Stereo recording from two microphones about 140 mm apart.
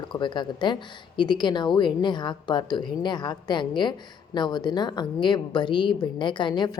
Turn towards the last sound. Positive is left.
turn(degrees=35)  # may be behind; listen again after turning